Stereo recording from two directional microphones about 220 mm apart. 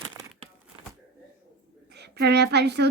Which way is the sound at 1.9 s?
50° right (ahead or behind).